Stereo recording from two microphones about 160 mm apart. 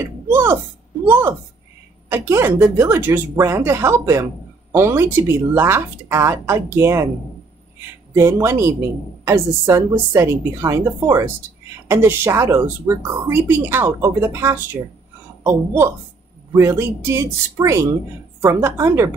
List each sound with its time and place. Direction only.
0.3 s a sound: 15° right (ahead or behind)
1.0 s a woman's voice: 15° right (ahead or behind)
8.1 s speech: 15° right (ahead or behind)